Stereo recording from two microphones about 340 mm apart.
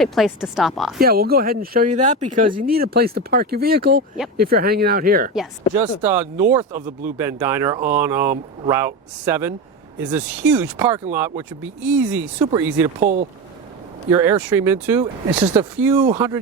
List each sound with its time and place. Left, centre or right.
0.0 s speech: centre
0.9 s speech: right
6.0 s speech: centre
6.6 s speech: right
7.0 s speech: centre
13.0 s speech: right
14.1 s speech: centre